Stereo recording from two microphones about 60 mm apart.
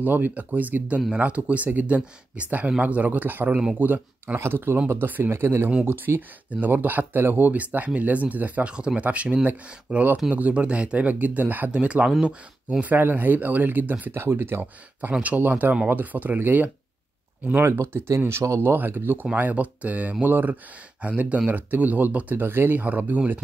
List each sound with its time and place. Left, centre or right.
0.0 s speech: right
4.4 s speech: right
11.7 s speech: centre
12.8 s speech: right
17.6 s speech: right
18.6 s speech: right